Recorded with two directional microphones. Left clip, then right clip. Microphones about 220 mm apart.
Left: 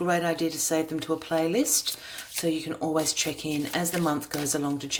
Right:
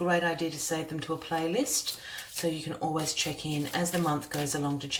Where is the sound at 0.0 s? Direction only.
45° left (ahead or behind).